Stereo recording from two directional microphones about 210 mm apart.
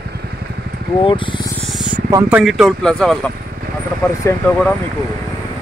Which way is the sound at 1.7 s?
5° right (ahead or behind).